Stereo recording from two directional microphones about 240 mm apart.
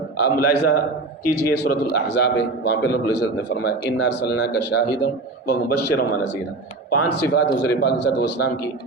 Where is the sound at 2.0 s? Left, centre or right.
Left.